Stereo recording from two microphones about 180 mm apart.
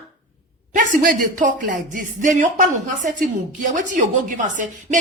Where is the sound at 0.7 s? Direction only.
45° right (ahead or behind).